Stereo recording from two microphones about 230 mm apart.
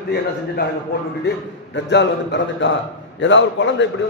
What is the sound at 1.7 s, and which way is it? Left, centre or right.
A man's voice, left.